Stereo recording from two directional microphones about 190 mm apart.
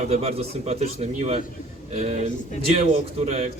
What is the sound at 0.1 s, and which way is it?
Speech, 30° right (ahead or behind).